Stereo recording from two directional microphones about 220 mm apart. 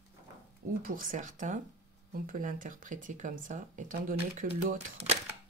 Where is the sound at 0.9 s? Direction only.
40° right (ahead or behind).